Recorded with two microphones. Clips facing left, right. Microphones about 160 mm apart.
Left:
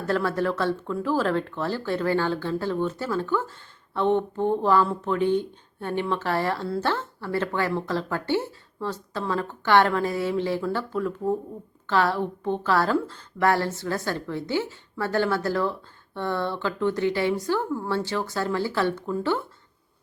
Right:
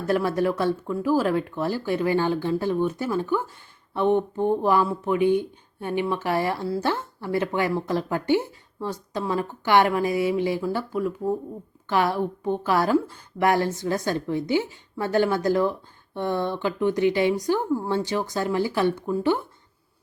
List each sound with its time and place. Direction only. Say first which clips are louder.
0.1 s speech: right 2 dB; 15° right (ahead or behind)